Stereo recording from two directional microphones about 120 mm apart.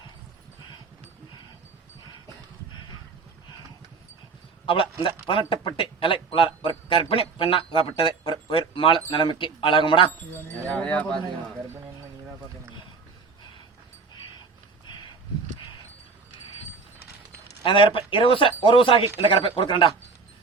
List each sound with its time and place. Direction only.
4.6 s speech: 45° left (ahead or behind)
10.3 s wind chime: 10° left (ahead or behind)
17.7 s speech: 45° left (ahead or behind)